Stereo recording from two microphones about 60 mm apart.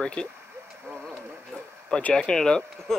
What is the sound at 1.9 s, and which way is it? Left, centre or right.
Speech, centre.